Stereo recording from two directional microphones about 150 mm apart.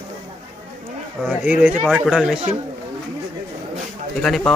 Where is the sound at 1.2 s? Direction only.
10° right (ahead or behind).